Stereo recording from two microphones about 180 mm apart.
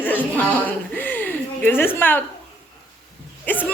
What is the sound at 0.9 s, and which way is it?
Chuckle, 10° left (ahead or behind).